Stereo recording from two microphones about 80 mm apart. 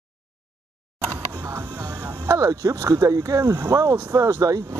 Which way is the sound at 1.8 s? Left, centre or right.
Right.